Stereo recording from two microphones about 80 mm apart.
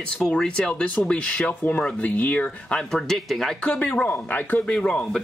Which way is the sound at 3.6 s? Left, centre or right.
Centre.